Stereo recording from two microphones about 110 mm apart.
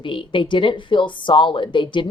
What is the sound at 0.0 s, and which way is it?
Speech, 50° left (ahead or behind).